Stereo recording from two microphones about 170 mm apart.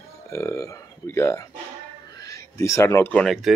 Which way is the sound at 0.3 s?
15° left (ahead or behind).